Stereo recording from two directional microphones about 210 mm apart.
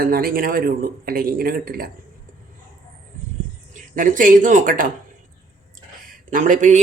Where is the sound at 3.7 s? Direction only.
40° right (ahead or behind).